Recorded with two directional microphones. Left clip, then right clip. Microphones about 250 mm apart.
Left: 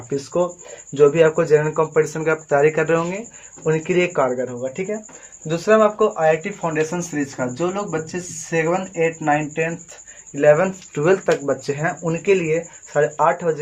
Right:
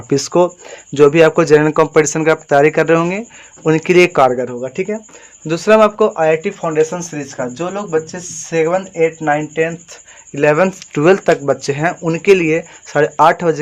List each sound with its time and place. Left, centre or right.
0.1 s speech: right